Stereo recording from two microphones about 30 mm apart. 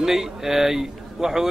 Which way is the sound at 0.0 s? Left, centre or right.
Centre.